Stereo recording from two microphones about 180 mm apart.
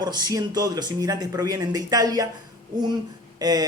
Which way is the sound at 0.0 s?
20° right (ahead or behind).